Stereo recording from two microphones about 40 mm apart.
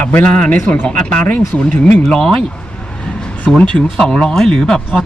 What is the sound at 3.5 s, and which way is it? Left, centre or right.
Speech, left.